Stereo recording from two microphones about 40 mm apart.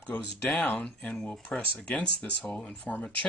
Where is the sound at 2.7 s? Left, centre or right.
Left.